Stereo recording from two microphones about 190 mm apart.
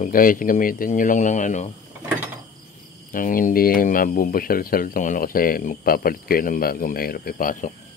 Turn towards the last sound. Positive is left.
turn(degrees=45)  # may be behind; listen again after turning